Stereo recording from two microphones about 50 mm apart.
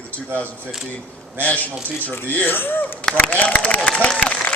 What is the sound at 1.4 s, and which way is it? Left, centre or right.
Speech, left.